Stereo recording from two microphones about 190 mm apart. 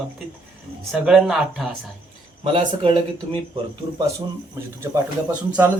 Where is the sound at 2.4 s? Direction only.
30° right (ahead or behind).